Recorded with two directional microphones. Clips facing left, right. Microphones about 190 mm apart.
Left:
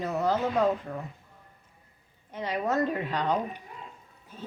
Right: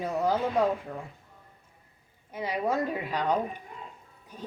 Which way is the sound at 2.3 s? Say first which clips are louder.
Left 1 dB; 10° right (ahead or behind).